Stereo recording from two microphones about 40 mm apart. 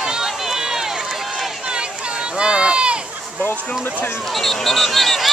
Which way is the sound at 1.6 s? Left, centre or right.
Right.